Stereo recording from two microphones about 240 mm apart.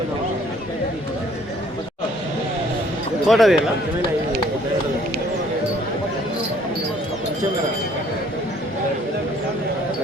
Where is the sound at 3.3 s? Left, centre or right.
Centre.